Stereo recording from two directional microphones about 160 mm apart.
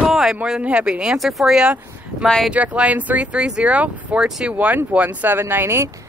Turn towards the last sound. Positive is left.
turn(degrees=-15)  # may be behind; listen again after turning